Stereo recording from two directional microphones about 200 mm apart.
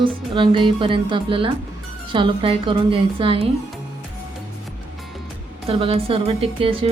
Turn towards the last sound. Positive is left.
turn(degrees=-25)  # may be behind; listen again after turning